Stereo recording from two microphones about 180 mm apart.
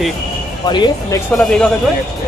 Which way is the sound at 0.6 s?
25° left (ahead or behind).